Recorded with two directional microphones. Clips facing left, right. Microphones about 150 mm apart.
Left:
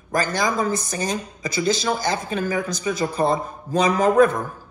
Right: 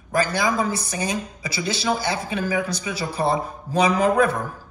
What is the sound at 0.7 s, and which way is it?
Speech, 50° left (ahead or behind).